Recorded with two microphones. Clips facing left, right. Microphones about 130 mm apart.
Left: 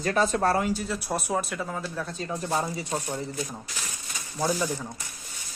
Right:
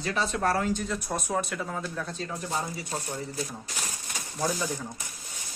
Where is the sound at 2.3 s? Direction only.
35° left (ahead or behind).